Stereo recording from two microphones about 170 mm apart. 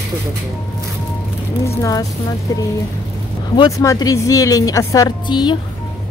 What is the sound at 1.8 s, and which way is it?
Speech, 20° left (ahead or behind).